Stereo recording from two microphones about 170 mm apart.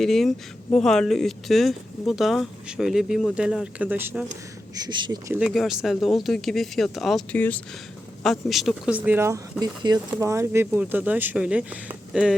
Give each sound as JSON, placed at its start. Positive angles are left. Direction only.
{"t": 0.0, "sound": "speech", "side_deg": 0}
{"t": 4.7, "sound": "speech", "side_deg": -25}
{"t": 5.3, "sound": "speech", "side_deg": -5}